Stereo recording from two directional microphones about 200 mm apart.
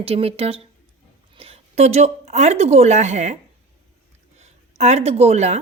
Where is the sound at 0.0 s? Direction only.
30° right (ahead or behind).